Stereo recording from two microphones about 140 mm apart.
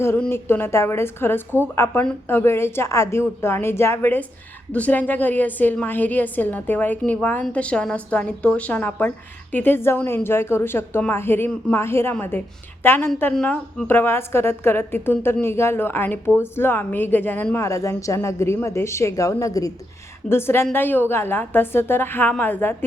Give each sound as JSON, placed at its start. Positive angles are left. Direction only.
{"t": 0.0, "sound": "a woman's voice", "side_deg": 15}